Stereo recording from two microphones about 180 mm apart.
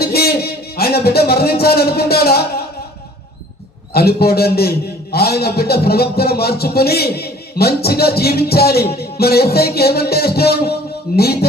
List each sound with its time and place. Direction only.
0.0 s a sound: 60° left (ahead or behind)
0.8 s a man's voice: 60° left (ahead or behind)
3.9 s a man's voice: 60° left (ahead or behind)